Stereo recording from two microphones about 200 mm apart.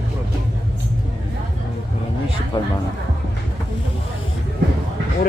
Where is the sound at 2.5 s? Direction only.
20° left (ahead or behind).